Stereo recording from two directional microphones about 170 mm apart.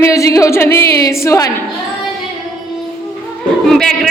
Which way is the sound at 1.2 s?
20° left (ahead or behind).